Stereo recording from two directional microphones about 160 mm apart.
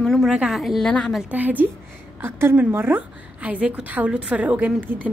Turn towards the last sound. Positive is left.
turn(degrees=-10)  # may be behind; listen again after turning